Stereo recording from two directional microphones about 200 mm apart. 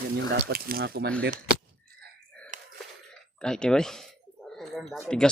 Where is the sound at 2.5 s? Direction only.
40° right (ahead or behind).